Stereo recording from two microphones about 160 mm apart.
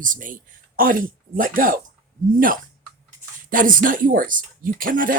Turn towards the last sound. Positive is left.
turn(degrees=-60)  # may be behind; listen again after turning